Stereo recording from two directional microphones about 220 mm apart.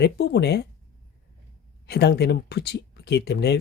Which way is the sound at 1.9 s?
50° left (ahead or behind).